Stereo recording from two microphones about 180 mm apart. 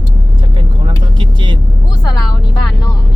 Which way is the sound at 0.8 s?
25° right (ahead or behind).